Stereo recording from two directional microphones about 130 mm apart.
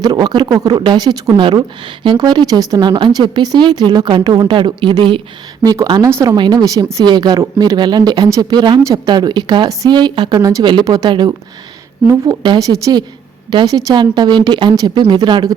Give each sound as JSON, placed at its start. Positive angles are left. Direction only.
{"t": 0.0, "sound": "speech", "side_deg": -30}
{"t": 6.3, "sound": "speech", "side_deg": -35}